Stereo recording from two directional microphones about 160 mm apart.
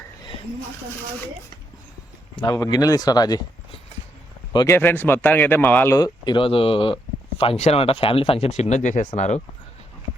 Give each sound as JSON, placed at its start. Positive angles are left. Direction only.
{"t": 2.3, "sound": "speech", "side_deg": 25}
{"t": 4.5, "sound": "speech", "side_deg": 15}